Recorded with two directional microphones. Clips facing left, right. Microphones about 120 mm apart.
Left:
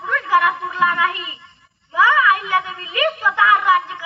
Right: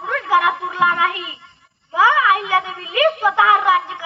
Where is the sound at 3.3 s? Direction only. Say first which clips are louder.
Right 1 dB; 45° right (ahead or behind).